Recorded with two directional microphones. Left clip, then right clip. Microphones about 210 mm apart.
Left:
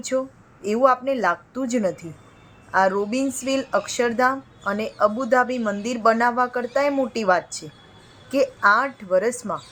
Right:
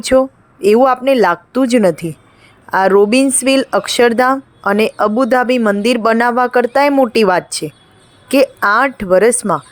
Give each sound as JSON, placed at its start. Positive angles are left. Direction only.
{"t": 0.0, "sound": "speech", "side_deg": -45}